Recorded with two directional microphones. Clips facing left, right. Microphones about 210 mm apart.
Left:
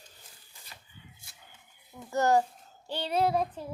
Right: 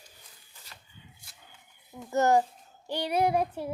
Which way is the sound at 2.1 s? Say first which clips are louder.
Right 2 dB; 20° right (ahead or behind).